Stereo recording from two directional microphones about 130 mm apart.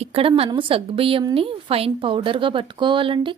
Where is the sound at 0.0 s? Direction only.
45° right (ahead or behind).